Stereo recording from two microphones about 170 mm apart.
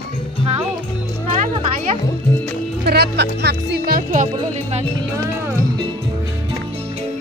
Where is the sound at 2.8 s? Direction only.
70° right (ahead or behind); by 4.3 s 55° right (ahead or behind).